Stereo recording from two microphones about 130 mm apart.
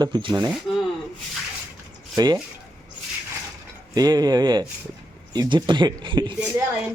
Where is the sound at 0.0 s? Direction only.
35° right (ahead or behind).